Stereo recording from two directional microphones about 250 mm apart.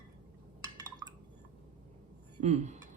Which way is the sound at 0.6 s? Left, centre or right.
Centre.